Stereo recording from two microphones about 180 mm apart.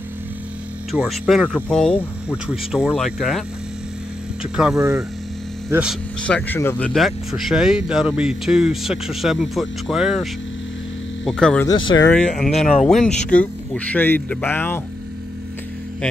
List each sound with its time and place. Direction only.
0.9 s speech: 5° right (ahead or behind)
4.7 s speech: 15° right (ahead or behind)
6.2 s speech: 10° left (ahead or behind)
6.9 s speech: centre (ahead or behind)
11.2 s speech: 5° left (ahead or behind)
11.6 s speech: 25° left (ahead or behind)
12.1 s speech: 5° left (ahead or behind)